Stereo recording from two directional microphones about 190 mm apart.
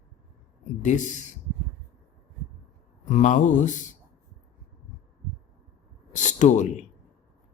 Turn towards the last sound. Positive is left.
turn(degrees=40)  # may be behind; listen again after turning